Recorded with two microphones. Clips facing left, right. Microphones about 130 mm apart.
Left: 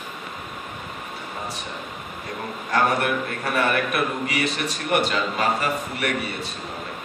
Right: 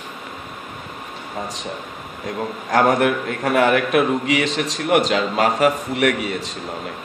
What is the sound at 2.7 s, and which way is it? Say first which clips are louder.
A man's voice: right 5 dB; 90° right.